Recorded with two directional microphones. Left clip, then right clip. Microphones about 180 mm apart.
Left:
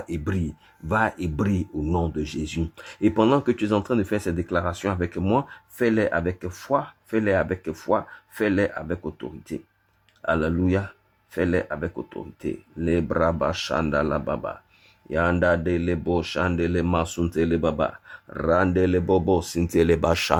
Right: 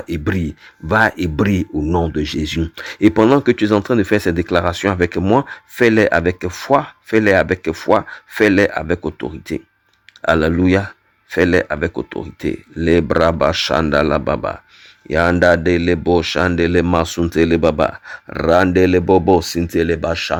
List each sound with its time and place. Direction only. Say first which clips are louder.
0.1 s speech: right 10 dB; 25° right (ahead or behind)
19.6 s speech: right 3 dB; centre (ahead or behind)